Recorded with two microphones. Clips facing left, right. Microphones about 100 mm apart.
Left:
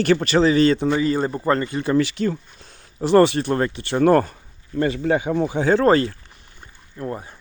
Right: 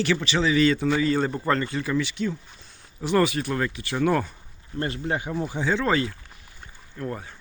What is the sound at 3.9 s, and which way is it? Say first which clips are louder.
Speech: left 8 dB; 50° left (ahead or behind).